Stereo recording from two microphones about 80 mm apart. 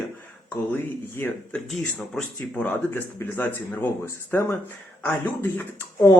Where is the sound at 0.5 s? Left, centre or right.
Left.